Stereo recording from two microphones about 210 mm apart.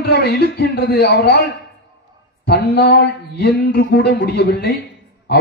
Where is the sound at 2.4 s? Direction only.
50° left (ahead or behind).